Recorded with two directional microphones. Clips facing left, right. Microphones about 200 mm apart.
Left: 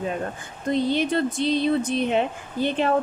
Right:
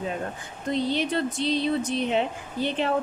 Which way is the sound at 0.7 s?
50° left (ahead or behind).